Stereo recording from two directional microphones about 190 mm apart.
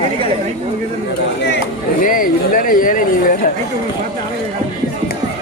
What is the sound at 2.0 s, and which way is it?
Speech, 45° left (ahead or behind).